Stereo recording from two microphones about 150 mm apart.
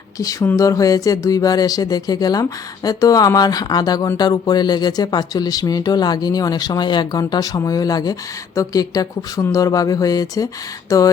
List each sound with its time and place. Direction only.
0.2 s speech: 20° left (ahead or behind)